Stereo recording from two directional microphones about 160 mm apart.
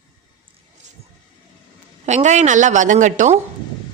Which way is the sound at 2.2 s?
50° right (ahead or behind).